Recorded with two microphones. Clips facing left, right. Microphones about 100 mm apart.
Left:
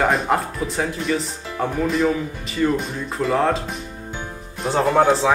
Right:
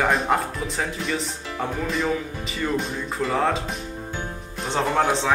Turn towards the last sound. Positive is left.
turn(degrees=5)  # may be behind; listen again after turning